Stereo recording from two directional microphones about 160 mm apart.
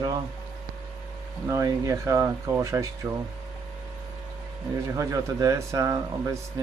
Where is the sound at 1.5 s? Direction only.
20° right (ahead or behind).